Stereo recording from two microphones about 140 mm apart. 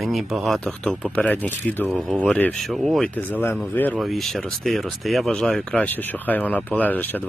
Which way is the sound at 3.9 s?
Centre (ahead or behind).